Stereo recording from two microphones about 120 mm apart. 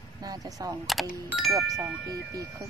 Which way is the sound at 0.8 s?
Centre (ahead or behind).